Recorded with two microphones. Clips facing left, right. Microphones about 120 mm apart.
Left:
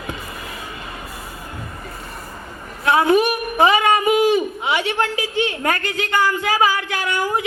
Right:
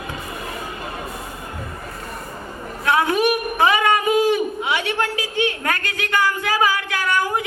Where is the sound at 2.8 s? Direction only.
20° left (ahead or behind).